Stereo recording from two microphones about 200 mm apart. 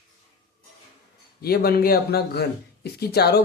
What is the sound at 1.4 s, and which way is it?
Speech, 50° left (ahead or behind).